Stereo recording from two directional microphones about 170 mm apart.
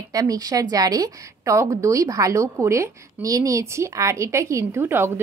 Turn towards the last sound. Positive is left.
turn(degrees=-15)  # may be behind; listen again after turning